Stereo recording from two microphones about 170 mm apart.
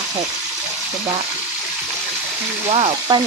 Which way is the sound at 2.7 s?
35° right (ahead or behind).